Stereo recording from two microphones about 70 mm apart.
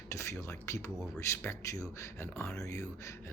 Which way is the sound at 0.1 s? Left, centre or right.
Left.